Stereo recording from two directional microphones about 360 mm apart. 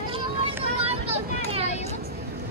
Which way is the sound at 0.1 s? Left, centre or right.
Centre.